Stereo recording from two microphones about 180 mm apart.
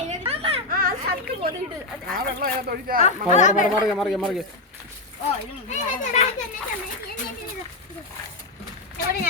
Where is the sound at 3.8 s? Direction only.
Centre (ahead or behind).